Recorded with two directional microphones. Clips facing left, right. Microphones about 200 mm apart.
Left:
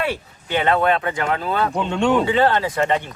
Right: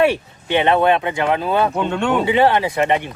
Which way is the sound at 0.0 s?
25° right (ahead or behind).